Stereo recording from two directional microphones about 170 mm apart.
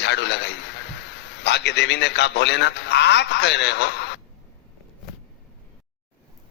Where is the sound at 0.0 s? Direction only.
90° left.